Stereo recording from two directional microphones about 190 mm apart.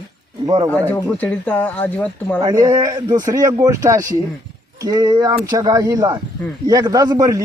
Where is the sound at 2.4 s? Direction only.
20° right (ahead or behind).